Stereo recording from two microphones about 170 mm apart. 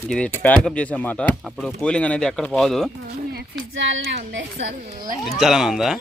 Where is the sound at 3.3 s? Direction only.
90° right.